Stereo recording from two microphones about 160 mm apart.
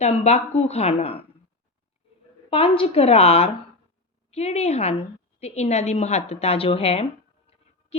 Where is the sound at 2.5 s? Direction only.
40° left (ahead or behind).